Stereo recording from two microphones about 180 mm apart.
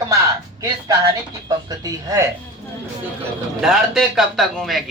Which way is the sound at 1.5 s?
20° right (ahead or behind).